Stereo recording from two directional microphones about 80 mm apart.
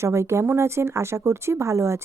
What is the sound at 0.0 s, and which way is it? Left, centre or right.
Speech, right.